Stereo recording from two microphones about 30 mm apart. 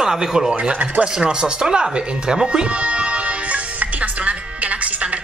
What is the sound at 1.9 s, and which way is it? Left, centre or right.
Music, right.